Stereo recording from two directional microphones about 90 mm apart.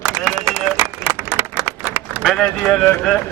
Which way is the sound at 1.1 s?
30° right (ahead or behind).